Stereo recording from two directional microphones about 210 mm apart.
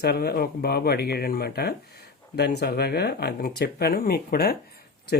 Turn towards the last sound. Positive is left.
turn(degrees=45)  # may be behind; listen again after turning